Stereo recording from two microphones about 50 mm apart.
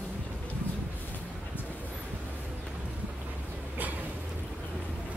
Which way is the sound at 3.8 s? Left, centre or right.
Right.